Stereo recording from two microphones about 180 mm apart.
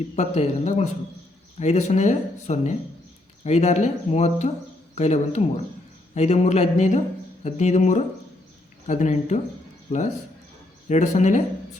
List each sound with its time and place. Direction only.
0.2 s speech: 40° left (ahead or behind)